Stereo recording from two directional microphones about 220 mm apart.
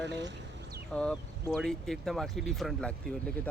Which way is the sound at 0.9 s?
5° left (ahead or behind).